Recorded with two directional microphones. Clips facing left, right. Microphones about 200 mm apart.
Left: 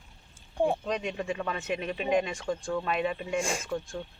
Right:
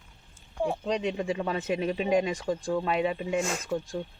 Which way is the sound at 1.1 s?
15° right (ahead or behind).